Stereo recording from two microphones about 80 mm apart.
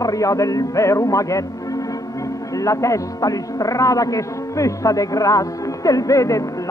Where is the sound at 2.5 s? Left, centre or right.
Left.